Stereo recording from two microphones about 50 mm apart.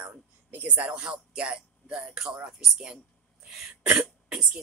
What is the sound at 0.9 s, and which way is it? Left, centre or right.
Speech, centre.